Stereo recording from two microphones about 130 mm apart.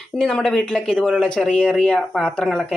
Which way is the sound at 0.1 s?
5° left (ahead or behind).